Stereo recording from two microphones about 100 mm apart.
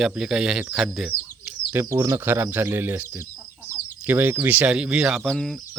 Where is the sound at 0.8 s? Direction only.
5° right (ahead or behind).